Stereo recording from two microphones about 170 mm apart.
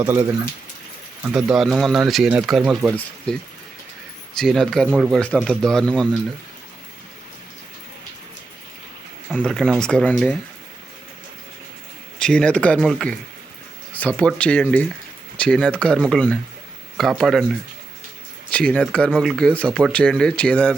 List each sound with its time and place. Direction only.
0.0 s speech: 15° right (ahead or behind)
4.4 s speech: centre (ahead or behind)
4.9 s speech: 10° right (ahead or behind)
5.1 s speech: 5° left (ahead or behind)
9.3 s speech: centre (ahead or behind)
12.2 s speech: 5° left (ahead or behind)
18.5 s speech: 5° left (ahead or behind)